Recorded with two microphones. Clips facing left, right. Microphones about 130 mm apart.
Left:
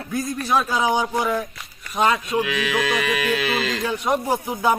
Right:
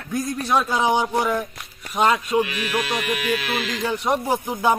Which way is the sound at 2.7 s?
90° left.